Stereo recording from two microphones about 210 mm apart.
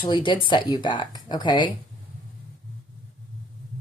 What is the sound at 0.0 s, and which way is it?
Speech, 25° left (ahead or behind).